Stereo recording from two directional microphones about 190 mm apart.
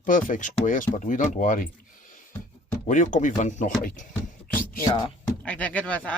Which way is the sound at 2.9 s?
40° left (ahead or behind).